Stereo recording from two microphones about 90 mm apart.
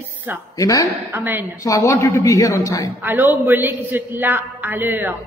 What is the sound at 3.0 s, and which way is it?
A man's voice, 20° right (ahead or behind).